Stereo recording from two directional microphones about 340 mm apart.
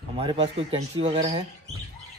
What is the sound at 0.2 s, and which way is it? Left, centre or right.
A man's voice, centre.